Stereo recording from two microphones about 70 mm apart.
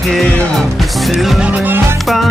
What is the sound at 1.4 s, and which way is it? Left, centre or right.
Honk, right.